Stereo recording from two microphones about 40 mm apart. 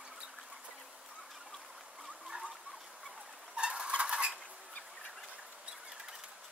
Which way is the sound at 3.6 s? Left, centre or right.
Right.